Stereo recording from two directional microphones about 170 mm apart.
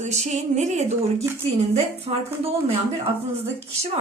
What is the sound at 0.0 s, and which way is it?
A woman's voice, 45° right (ahead or behind).